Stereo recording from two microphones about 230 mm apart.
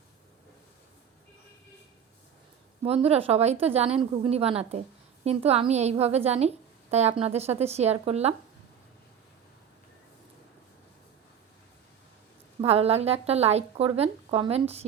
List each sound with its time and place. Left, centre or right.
2.8 s speech: right
12.6 s speech: right